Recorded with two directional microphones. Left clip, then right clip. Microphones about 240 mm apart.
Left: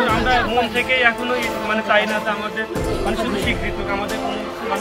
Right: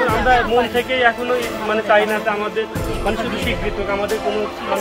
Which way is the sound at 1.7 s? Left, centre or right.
Right.